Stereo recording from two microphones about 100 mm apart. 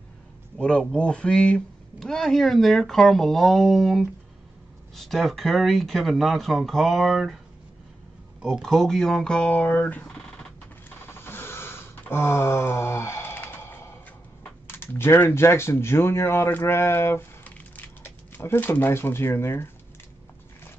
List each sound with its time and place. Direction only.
0.6 s speech: 10° left (ahead or behind)
8.5 s speech: centre (ahead or behind)
11.1 s a sound: 25° left (ahead or behind)
14.7 s speech: 20° left (ahead or behind)